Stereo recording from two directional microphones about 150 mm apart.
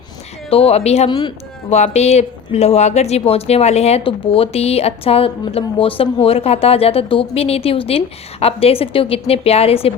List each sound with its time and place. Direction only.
0.5 s speech: 40° left (ahead or behind)